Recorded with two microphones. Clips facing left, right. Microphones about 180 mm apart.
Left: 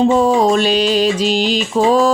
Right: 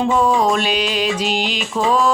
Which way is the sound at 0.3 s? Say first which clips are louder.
Left 4 dB; 30° left (ahead or behind).